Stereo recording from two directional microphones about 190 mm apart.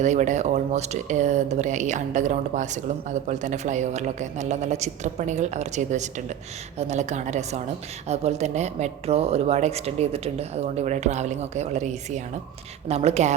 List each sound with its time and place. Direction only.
0.0 s speech: 40° right (ahead or behind)